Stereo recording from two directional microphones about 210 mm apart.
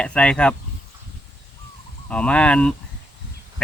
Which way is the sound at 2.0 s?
5° left (ahead or behind).